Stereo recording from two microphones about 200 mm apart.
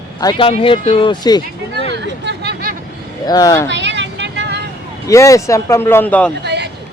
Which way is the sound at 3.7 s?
60° right (ahead or behind).